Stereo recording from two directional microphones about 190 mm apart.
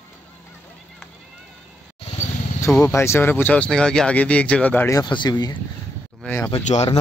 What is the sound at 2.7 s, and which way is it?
Speech, 10° left (ahead or behind).